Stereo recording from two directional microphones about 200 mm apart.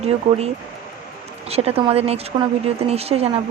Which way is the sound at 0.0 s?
30° right (ahead or behind).